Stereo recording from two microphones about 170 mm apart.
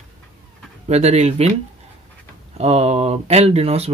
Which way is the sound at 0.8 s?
40° right (ahead or behind).